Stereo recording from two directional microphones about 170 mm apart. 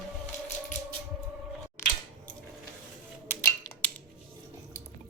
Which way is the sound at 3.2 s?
15° left (ahead or behind).